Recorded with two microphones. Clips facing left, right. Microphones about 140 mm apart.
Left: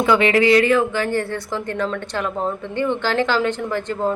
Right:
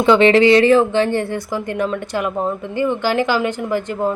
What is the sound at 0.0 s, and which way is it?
A woman's voice, 25° right (ahead or behind).